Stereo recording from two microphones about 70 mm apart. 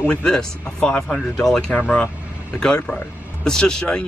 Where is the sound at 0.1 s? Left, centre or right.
Centre.